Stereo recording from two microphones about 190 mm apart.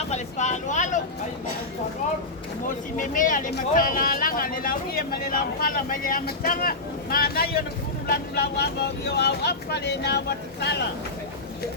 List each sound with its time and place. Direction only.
0.1 s speech: 40° left (ahead or behind)
2.6 s speech: 45° left (ahead or behind); by 10.8 s 60° left (ahead or behind)